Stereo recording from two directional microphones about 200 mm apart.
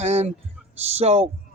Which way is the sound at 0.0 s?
35° right (ahead or behind).